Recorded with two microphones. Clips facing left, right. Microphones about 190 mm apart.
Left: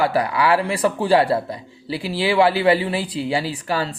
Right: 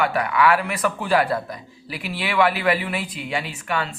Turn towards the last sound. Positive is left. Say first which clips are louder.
# left 3 dB
turn(degrees=35)  # may be behind; listen again after turning